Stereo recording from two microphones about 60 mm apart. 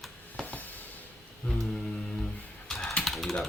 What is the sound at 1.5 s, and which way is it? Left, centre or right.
Mantra, centre.